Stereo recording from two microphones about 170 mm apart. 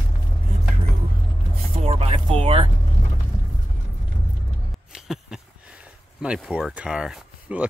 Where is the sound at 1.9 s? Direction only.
35° right (ahead or behind).